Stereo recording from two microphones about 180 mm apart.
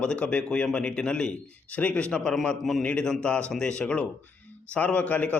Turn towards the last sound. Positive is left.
turn(degrees=10)  # may be behind; listen again after turning